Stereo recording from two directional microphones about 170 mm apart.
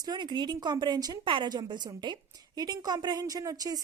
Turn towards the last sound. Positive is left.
turn(degrees=-20)  # may be behind; listen again after turning